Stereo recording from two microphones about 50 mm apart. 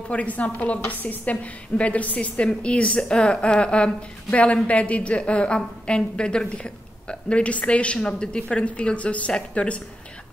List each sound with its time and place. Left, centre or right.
0.1 s a woman's voice: left